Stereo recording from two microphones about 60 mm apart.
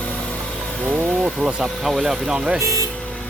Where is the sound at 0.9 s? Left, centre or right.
Right.